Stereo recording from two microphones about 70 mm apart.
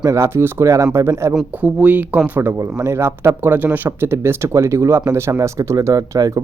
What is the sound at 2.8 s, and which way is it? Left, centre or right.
Speech, right.